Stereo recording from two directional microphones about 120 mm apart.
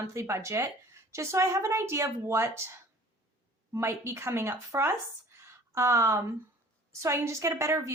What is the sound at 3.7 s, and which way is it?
A woman's voice, 20° right (ahead or behind).